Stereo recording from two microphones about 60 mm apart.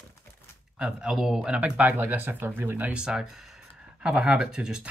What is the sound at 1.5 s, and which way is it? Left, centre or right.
Speech, right.